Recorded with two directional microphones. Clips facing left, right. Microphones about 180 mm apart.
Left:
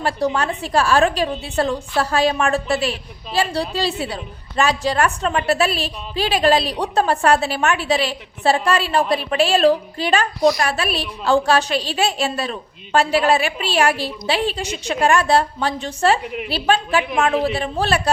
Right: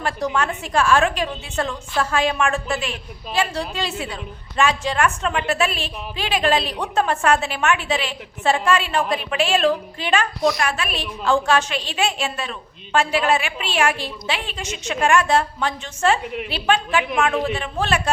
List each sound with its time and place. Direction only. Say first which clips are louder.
0.0 s a woman's voice: left 3 dB; 35° left (ahead or behind)